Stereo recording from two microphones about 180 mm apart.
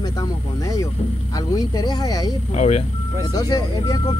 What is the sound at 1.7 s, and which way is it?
Speech, 20° left (ahead or behind).